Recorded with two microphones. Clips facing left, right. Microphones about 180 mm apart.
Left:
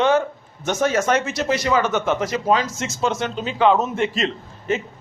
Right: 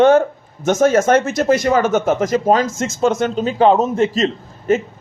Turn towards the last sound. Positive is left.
turn(degrees=-45)  # may be behind; listen again after turning